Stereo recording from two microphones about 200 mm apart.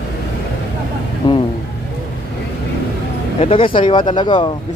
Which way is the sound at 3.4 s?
25° left (ahead or behind).